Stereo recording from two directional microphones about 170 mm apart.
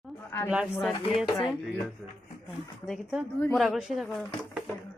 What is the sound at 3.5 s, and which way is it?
Speech, centre (ahead or behind).